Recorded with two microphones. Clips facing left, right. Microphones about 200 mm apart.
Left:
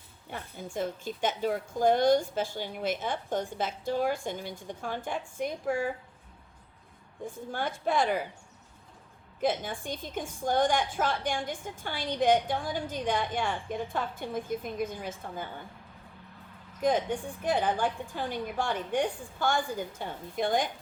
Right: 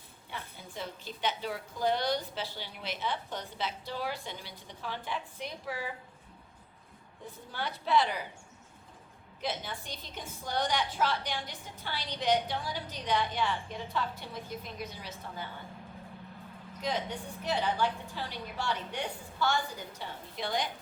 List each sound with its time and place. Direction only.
0.3 s a woman's voice: 50° left (ahead or behind)
7.3 s a woman's voice: 50° left (ahead or behind)
9.4 s a woman's voice: 50° left (ahead or behind)
16.8 s a woman's voice: 50° left (ahead or behind)